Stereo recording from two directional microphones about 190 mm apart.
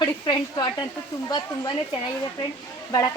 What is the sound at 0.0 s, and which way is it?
A woman's voice, 25° left (ahead or behind).